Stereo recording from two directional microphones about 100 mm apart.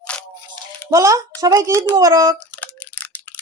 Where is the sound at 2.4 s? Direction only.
15° left (ahead or behind).